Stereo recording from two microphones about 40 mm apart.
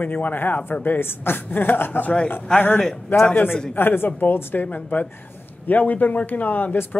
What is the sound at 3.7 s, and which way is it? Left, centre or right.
Speech, left.